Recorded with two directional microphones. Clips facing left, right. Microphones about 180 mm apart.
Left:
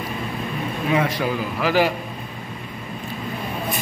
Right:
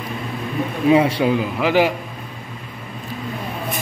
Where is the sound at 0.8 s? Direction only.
30° right (ahead or behind).